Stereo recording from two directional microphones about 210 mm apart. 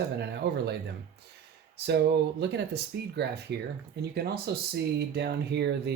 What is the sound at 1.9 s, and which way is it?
Speech, 50° right (ahead or behind).